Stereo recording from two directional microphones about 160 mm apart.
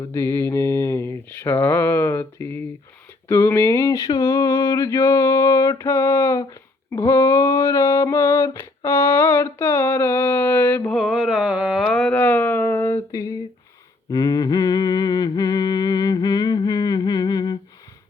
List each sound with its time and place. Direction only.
0.1 s mantra: 15° left (ahead or behind)
3.2 s a sound: 15° left (ahead or behind)
14.1 s humming: 25° left (ahead or behind)